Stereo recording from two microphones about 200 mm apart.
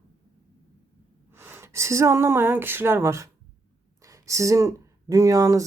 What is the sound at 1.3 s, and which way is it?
Speech, 10° right (ahead or behind).